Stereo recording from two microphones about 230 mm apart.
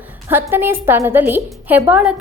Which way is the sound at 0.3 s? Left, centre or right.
Centre.